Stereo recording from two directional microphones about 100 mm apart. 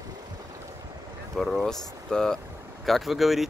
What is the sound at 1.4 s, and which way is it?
Speech, centre (ahead or behind).